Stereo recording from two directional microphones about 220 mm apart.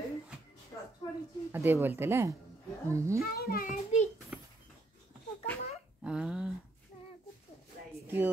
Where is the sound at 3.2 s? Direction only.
45° left (ahead or behind).